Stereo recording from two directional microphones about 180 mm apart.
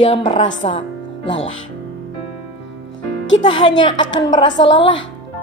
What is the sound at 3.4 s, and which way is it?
Speech, 25° left (ahead or behind).